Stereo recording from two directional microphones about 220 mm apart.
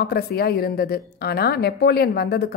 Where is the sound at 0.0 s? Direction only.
45° left (ahead or behind).